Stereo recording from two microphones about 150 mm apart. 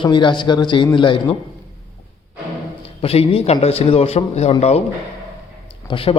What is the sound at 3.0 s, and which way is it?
A man's voice, 40° left (ahead or behind).